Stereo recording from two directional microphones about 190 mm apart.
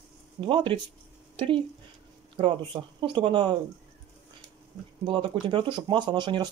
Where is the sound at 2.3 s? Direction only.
25° right (ahead or behind).